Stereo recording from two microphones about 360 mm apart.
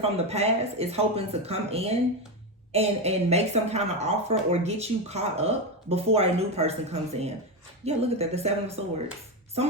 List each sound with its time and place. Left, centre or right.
0.0 s speech: centre